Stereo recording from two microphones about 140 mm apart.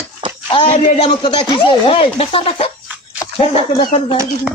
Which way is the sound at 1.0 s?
35° left (ahead or behind).